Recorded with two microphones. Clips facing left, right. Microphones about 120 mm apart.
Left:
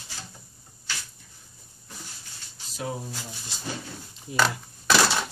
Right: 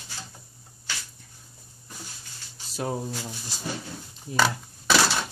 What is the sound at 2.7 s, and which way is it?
Speech, 45° right (ahead or behind).